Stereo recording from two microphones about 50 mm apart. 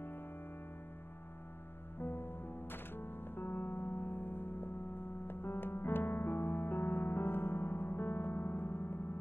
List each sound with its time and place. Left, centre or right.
2.0 s music: left